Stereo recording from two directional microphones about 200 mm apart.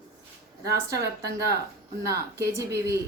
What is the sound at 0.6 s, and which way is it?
Speech, 15° right (ahead or behind).